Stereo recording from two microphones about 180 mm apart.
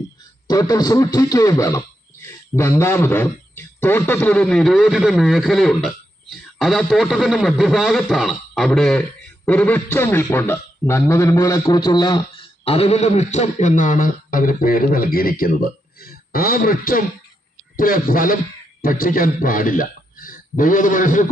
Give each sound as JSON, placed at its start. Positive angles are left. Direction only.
{"t": 0.4, "sound": "a man's voice", "side_deg": 20}